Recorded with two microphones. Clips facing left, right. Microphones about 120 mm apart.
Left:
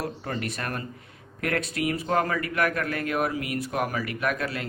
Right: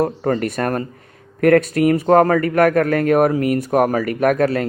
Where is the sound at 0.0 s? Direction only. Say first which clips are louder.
Right 13 dB; 45° right (ahead or behind).